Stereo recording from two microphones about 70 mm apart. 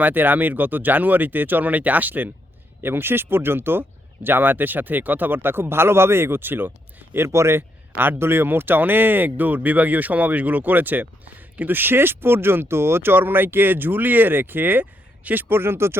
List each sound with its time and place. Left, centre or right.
0.0 s speech: right
7.3 s speech: right